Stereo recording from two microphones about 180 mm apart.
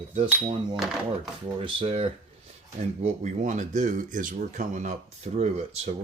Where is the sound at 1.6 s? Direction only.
30° right (ahead or behind).